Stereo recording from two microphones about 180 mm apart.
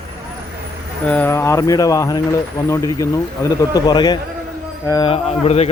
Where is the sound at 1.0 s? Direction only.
10° left (ahead or behind).